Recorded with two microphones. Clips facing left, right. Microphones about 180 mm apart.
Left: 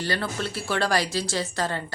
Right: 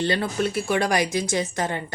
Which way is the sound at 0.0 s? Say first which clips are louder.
Right 5 dB; 20° right (ahead or behind).